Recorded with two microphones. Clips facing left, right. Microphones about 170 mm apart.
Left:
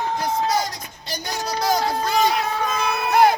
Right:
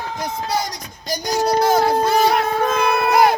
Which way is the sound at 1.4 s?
55° right (ahead or behind).